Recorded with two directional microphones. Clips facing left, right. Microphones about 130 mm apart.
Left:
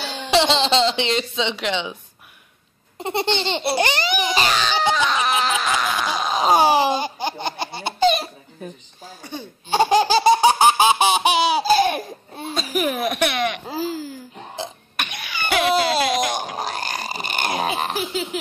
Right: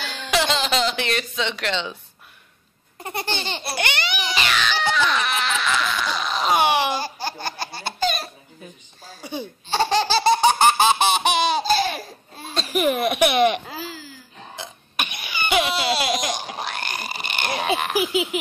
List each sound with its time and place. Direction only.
0.0 s speech: 25° left (ahead or behind)
3.0 s laughter: 25° left (ahead or behind)
3.8 s laughter: 40° left (ahead or behind)
4.3 s baby cry: 35° left (ahead or behind)
5.2 s baby laughter: 35° left (ahead or behind); by 8.3 s 20° left (ahead or behind)
9.2 s speech: 10° right (ahead or behind)
9.7 s laughter: 15° left (ahead or behind)
12.5 s speech: centre (ahead or behind)
13.2 s speech: 20° right (ahead or behind)
13.7 s a sound: 40° left (ahead or behind)
15.0 s laughter: 10° right (ahead or behind)
15.6 s a sound: 45° left (ahead or behind)
17.9 s a sound: 10° right (ahead or behind)